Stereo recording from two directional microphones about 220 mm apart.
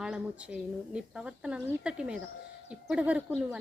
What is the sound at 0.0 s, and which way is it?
Speech, 5° right (ahead or behind).